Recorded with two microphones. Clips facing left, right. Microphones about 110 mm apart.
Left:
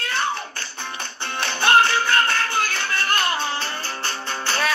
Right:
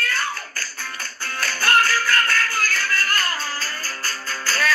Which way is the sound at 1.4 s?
25° left (ahead or behind).